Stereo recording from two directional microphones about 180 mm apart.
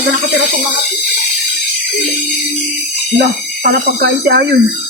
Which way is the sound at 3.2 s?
55° right (ahead or behind).